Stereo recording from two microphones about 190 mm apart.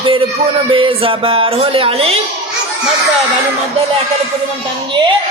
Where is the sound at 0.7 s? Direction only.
30° right (ahead or behind).